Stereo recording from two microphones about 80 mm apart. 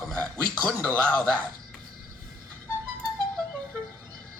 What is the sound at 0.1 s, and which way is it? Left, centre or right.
A man's voice, centre.